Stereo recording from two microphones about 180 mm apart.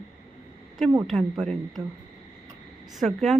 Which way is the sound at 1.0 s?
Centre (ahead or behind).